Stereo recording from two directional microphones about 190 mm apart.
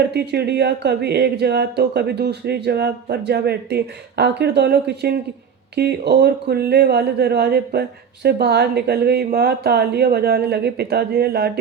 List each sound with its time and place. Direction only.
0.1 s speech: 60° right (ahead or behind)